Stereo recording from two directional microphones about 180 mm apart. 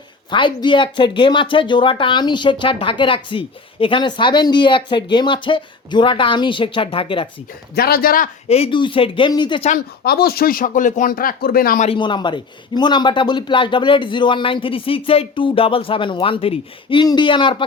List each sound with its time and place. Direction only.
0.3 s speech: 25° left (ahead or behind)
7.8 s speech: 55° left (ahead or behind)
8.4 s speech: 35° left (ahead or behind)
9.6 s speech: 55° left (ahead or behind)
11.9 s speech: 25° left (ahead or behind)